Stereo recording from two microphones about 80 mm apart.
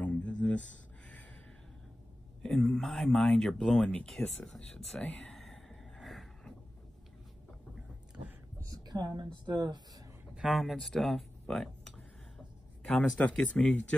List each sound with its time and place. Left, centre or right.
0.0 s a sound: centre
2.4 s speech: centre
5.0 s speech: centre
5.3 s a sound: centre
8.6 s speech: right
10.3 s speech: centre